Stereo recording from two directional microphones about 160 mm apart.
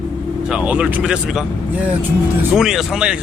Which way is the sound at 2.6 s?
Centre (ahead or behind).